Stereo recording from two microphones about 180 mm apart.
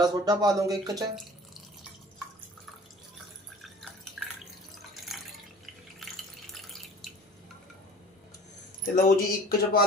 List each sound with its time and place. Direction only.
0.0 s speech: 20° right (ahead or behind)
5.1 s water: centre (ahead or behind)
6.5 s drip: centre (ahead or behind)
8.8 s speech: 50° left (ahead or behind)